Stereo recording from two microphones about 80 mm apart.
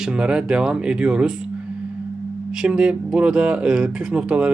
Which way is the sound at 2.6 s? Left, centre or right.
Centre.